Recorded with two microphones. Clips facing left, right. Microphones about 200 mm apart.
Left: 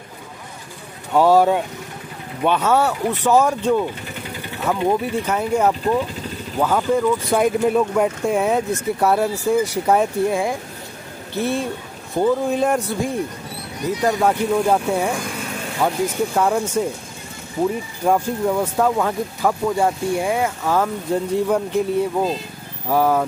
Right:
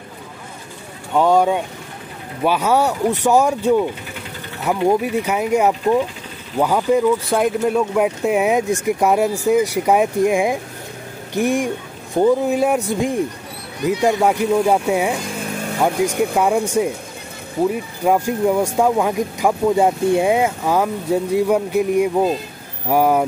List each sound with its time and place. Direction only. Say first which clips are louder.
1.1 s speech: left 1 dB; 5° left (ahead or behind)
2.4 s speech: right 1 dB; 10° right (ahead or behind)
7.3 s speech: even; centre (ahead or behind)
18.0 s speech: right 2 dB; 10° right (ahead or behind)